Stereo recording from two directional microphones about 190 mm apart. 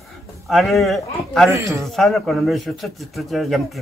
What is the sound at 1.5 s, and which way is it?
Speech, 15° right (ahead or behind).